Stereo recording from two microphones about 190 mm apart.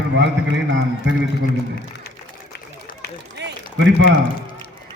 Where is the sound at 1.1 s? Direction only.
80° right.